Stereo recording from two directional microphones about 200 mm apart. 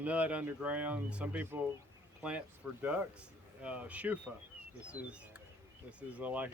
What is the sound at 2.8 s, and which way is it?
Speech, 5° right (ahead or behind).